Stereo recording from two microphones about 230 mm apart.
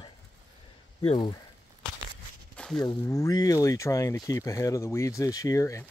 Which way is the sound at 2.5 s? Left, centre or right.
Centre.